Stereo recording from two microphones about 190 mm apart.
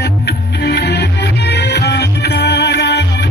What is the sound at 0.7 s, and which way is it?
Music, 65° left (ahead or behind).